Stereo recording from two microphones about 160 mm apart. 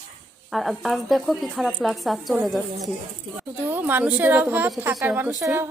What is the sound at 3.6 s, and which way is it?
Speech, 15° right (ahead or behind).